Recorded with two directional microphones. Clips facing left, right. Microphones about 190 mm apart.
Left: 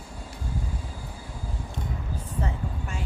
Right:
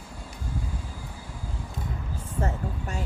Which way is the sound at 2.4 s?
40° right (ahead or behind).